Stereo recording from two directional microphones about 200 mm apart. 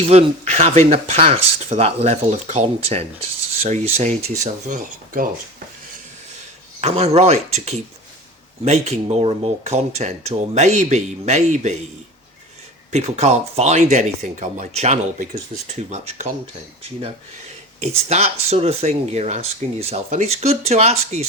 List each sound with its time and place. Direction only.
0.0 s speech: 30° right (ahead or behind)
6.8 s speech: 30° right (ahead or behind)
12.9 s speech: 35° right (ahead or behind)
17.7 s speech: 35° right (ahead or behind)